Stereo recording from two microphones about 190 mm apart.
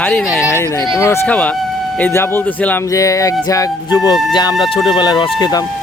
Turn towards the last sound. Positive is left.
turn(degrees=20)  # may be behind; listen again after turning